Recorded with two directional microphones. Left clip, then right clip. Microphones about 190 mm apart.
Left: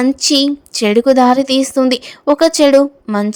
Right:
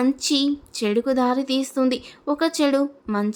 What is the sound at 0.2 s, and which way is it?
Speech, 35° left (ahead or behind).